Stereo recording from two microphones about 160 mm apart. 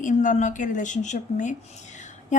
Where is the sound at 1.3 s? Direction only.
50° left (ahead or behind).